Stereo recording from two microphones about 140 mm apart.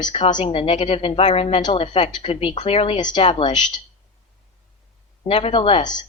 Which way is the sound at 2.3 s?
45° left (ahead or behind).